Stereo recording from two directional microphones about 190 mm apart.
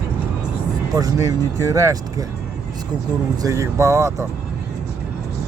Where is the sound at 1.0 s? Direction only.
20° right (ahead or behind).